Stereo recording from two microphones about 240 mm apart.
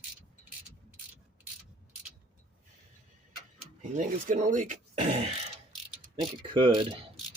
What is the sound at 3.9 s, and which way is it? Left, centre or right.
Speech, right.